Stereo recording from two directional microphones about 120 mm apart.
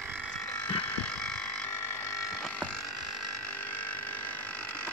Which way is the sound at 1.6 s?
20° left (ahead or behind).